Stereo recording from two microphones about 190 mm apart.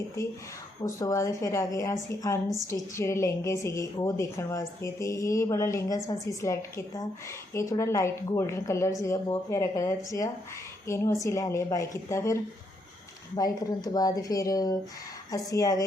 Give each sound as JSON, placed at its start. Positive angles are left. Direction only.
{"t": 0.9, "sound": "a woman's voice", "side_deg": 15}